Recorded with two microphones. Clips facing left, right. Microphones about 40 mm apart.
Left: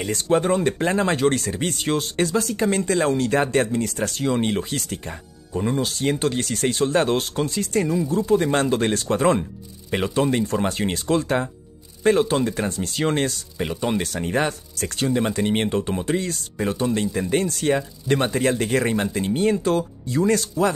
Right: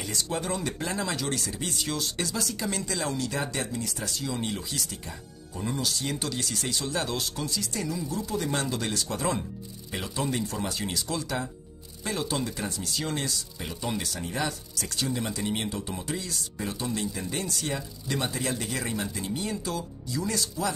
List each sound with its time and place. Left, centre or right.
0.0 s speech: left
5.5 s speech: left